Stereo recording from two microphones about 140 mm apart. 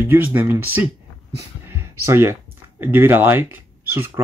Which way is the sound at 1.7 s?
15° right (ahead or behind).